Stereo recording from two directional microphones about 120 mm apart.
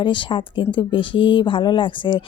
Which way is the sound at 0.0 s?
40° left (ahead or behind).